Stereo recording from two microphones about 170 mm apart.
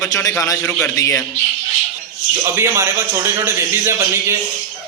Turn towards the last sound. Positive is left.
turn(degrees=-15)  # may be behind; listen again after turning